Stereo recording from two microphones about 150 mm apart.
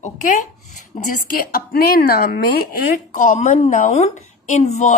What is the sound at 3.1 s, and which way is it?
A woman's voice, 55° left (ahead or behind).